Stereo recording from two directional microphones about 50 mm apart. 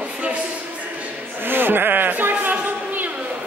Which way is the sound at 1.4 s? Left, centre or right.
Right.